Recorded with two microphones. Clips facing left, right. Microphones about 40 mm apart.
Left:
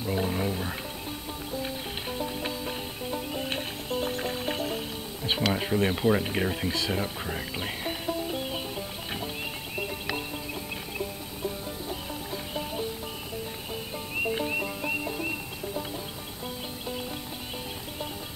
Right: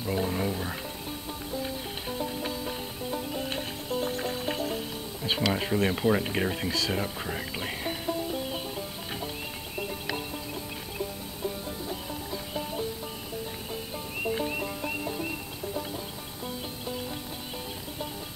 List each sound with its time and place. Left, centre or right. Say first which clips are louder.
0.0 s speech: even; centre
2.5 s music: even; centre
5.5 s speech: left 1 dB; centre
8.3 s music: even; centre
11.0 s music: right 1 dB; centre
14.2 s music: left 1 dB; centre